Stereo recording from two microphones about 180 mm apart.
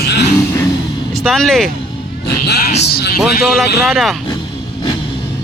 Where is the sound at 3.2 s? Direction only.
Centre (ahead or behind).